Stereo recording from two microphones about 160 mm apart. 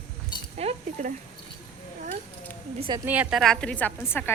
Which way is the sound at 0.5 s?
40° right (ahead or behind).